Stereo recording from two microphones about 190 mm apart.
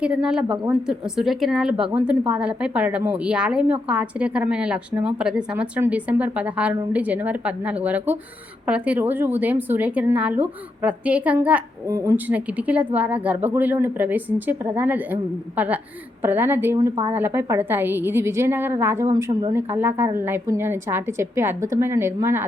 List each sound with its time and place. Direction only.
0.0 s speech: 5° right (ahead or behind)
0.4 s a woman's voice: 25° right (ahead or behind)
0.7 s a woman's voice: 5° right (ahead or behind)